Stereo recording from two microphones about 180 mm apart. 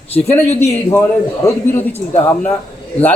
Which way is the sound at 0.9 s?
15° left (ahead or behind).